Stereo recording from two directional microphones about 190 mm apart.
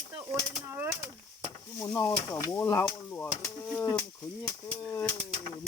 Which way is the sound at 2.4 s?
15° left (ahead or behind).